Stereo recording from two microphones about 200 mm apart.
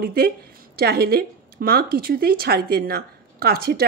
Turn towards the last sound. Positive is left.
turn(degrees=-50)  # may be behind; listen again after turning